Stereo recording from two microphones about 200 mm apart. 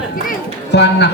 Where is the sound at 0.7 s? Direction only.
60° left (ahead or behind).